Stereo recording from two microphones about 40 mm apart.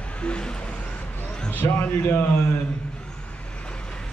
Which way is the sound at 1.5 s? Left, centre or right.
Left.